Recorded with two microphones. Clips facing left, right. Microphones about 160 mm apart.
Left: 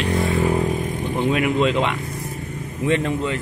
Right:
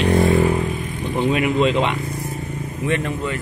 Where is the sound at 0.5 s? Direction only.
40° left (ahead or behind).